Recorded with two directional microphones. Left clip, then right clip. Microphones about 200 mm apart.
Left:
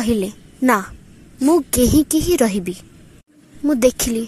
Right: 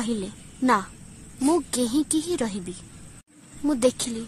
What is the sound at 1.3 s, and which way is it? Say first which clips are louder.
Speech: left 7 dB; 10° left (ahead or behind).